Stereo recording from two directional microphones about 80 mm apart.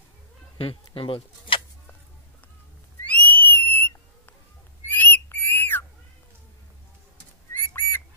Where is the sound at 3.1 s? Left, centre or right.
Left.